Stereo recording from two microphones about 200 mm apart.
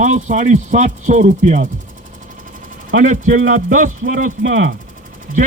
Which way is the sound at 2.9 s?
40° right (ahead or behind).